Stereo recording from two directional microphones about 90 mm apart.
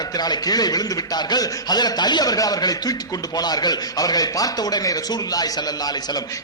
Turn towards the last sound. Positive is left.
turn(degrees=45)  # may be behind; listen again after turning